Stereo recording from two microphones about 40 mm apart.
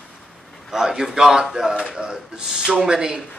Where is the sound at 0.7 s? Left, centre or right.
Centre.